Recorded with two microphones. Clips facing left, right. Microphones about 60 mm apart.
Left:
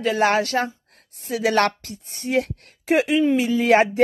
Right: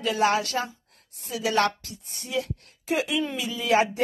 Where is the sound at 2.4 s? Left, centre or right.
Left.